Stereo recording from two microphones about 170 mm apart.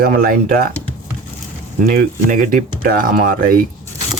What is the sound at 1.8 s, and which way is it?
Speech, 55° right (ahead or behind).